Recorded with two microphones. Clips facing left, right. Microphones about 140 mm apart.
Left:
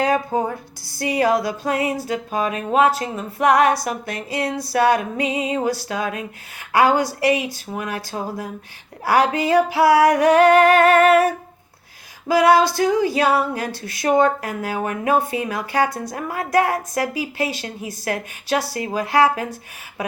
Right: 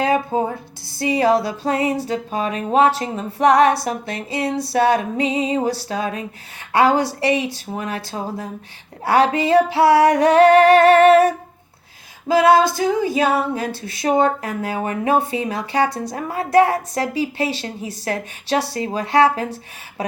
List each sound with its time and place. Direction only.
0.0 s a woman's voice: 25° right (ahead or behind)
12.3 s a woman's voice: 25° right (ahead or behind)